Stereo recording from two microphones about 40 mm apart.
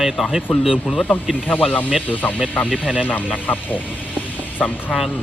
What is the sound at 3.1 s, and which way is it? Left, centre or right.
Speech, left.